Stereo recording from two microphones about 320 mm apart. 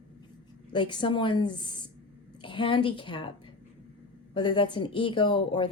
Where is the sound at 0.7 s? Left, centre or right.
Centre.